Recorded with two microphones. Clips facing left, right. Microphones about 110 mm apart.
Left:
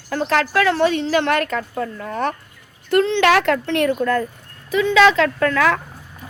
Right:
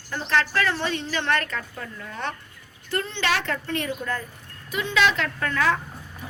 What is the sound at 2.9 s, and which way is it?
A woman's voice, 70° left (ahead or behind).